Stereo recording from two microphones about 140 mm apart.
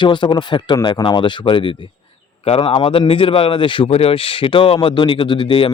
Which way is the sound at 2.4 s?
45° left (ahead or behind).